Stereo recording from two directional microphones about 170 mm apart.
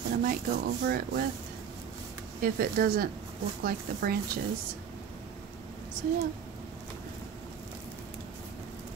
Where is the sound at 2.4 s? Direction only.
60° right (ahead or behind).